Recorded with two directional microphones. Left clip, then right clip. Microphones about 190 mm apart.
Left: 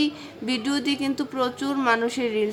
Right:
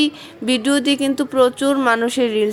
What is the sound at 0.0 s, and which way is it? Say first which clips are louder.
A woman's voice: right 6 dB; 30° right (ahead or behind).